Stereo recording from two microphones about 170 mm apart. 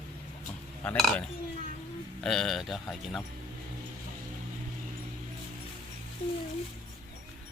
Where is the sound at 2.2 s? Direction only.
Centre (ahead or behind).